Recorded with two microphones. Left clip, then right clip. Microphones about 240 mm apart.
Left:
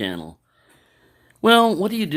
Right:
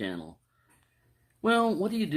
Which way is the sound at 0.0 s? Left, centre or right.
Left.